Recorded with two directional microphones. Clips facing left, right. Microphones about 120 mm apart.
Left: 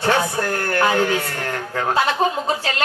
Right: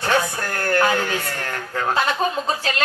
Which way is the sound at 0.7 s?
25° left (ahead or behind).